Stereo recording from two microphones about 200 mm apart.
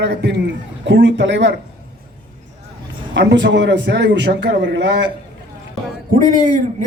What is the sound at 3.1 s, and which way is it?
A man's voice, 65° right (ahead or behind).